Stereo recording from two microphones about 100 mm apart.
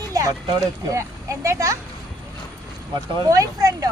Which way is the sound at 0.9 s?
30° right (ahead or behind).